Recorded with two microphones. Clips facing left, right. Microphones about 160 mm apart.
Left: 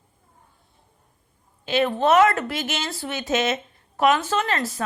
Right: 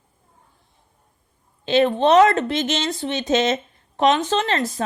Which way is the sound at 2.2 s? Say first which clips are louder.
Right 4 dB; 20° right (ahead or behind).